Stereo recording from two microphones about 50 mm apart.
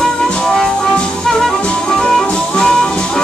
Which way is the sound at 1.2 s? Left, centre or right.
Centre.